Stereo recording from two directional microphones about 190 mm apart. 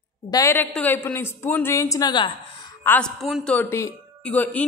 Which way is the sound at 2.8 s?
5° left (ahead or behind).